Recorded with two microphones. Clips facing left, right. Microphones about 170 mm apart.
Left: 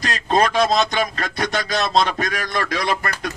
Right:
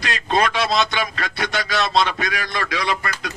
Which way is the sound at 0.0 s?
40° left (ahead or behind).